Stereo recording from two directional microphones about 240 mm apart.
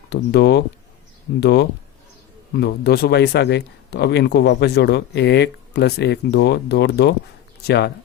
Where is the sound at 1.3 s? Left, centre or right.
Left.